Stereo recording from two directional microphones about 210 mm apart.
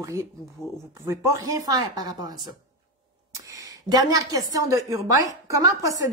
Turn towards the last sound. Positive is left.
turn(degrees=-15)  # may be behind; listen again after turning